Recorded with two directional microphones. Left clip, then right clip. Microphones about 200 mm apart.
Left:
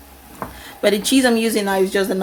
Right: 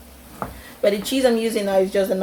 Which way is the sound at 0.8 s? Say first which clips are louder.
Left 2 dB; 35° left (ahead or behind).